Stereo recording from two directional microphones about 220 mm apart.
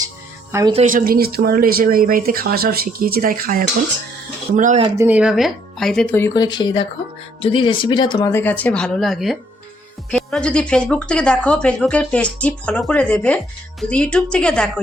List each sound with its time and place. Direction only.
0.7 s speech: 35° right (ahead or behind)
4.9 s speech: 5° right (ahead or behind)